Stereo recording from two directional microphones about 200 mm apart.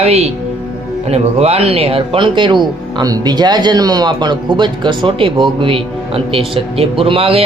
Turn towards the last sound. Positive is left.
turn(degrees=-30)  # may be behind; listen again after turning